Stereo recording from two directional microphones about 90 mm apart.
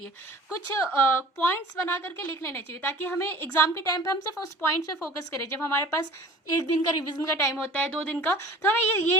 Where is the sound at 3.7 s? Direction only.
35° left (ahead or behind).